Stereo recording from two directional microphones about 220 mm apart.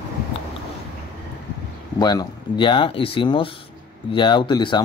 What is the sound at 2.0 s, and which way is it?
Speech, 20° left (ahead or behind).